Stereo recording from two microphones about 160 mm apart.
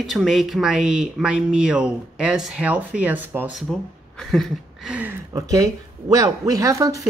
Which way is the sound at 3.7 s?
Centre (ahead or behind).